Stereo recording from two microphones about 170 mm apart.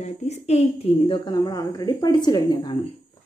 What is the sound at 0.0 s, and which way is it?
Speech, 40° left (ahead or behind).